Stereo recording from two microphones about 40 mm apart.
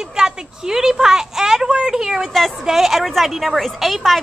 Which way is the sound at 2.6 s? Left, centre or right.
Centre.